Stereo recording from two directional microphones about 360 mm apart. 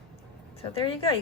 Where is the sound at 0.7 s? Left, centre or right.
Centre.